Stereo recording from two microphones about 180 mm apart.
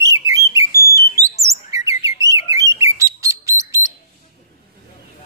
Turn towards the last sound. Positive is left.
turn(degrees=-15)  # may be behind; listen again after turning